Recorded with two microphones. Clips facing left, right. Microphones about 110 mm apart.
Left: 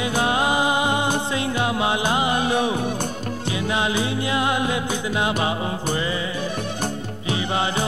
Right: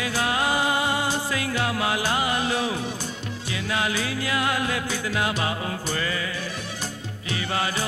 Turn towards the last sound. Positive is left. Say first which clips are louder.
# left 4 dB
turn(degrees=20)  # may be behind; listen again after turning